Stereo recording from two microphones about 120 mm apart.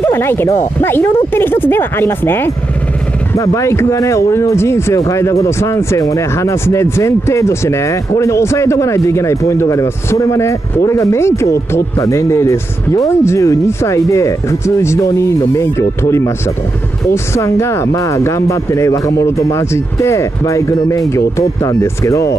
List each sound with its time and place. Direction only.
0.0 s speech: 20° left (ahead or behind)